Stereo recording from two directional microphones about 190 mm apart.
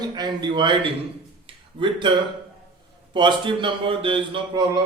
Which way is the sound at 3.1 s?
25° right (ahead or behind).